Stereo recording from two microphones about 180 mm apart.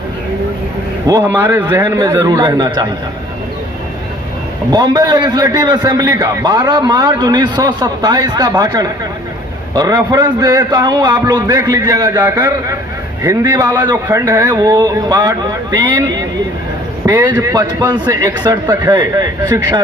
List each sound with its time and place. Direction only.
1.0 s a man's voice: 15° right (ahead or behind)
4.7 s a man's voice: 25° right (ahead or behind)
17.1 s a man's voice: 15° right (ahead or behind)